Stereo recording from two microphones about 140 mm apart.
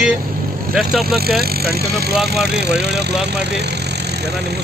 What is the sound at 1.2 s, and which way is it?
Speech, 90° right.